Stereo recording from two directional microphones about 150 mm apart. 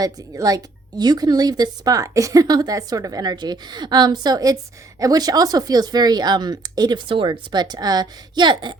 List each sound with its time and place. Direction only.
0.0 s speech: 25° right (ahead or behind)